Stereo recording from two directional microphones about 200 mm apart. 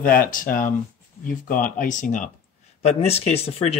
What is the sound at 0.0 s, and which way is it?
Speech, 45° left (ahead or behind).